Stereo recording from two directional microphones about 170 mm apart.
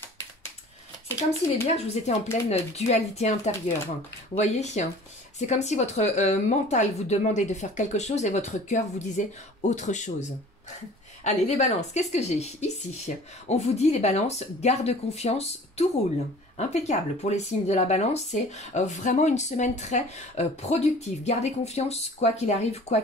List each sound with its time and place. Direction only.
1.7 s speech: 40° left (ahead or behind)
11.2 s speech: 40° left (ahead or behind)